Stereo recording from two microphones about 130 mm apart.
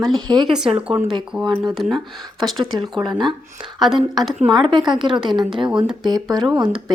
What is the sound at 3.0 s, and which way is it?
Speech, 35° right (ahead or behind).